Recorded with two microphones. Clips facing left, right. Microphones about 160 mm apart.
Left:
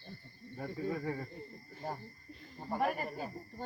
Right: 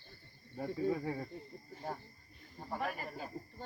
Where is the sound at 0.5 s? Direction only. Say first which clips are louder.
Right 3 dB; 10° right (ahead or behind).